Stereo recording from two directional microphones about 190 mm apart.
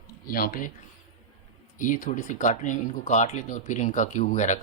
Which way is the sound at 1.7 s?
45° left (ahead or behind).